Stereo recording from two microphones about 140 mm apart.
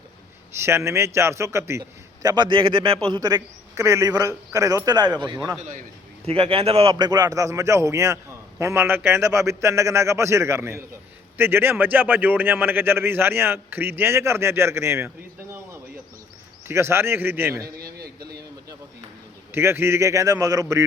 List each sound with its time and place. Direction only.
0.5 s a man's voice: 20° right (ahead or behind)
5.5 s a man's voice: 60° right (ahead or behind)
6.2 s a man's voice: 40° right (ahead or behind)
7.0 s a man's voice: 25° right (ahead or behind)
17.7 s a sound: 90° right
19.5 s a man's voice: 15° right (ahead or behind)